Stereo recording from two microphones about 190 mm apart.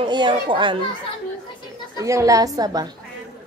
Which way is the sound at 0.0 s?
25° right (ahead or behind).